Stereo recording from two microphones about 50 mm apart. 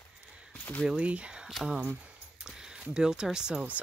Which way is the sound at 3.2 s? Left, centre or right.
Centre.